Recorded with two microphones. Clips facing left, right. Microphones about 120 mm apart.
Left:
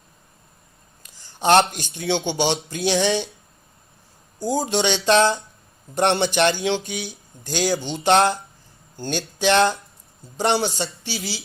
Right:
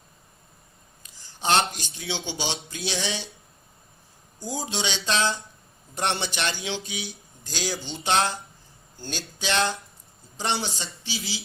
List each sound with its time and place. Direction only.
1.2 s a man's voice: 60° left (ahead or behind)
4.4 s a man's voice: 60° left (ahead or behind)